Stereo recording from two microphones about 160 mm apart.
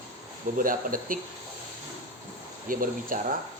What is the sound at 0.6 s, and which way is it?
Speech, 60° right (ahead or behind).